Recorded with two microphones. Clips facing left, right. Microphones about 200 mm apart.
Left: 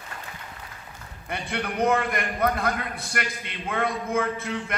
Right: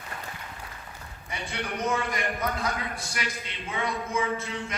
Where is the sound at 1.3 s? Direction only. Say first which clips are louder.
Left 4 dB; 60° left (ahead or behind).